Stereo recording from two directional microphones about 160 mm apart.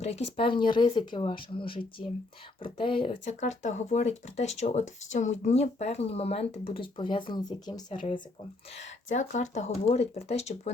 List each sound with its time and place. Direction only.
0.3 s speech: 30° left (ahead or behind)
8.8 s speech: 50° left (ahead or behind)